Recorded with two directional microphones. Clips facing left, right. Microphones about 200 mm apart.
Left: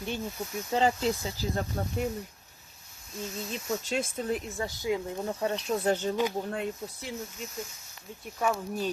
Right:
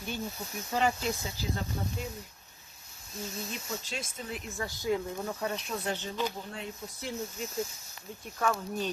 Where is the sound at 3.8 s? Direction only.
50° left (ahead or behind).